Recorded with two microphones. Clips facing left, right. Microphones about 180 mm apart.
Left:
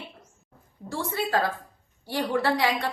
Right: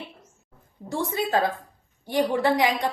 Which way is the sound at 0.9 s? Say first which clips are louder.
Right 2 dB; 20° right (ahead or behind).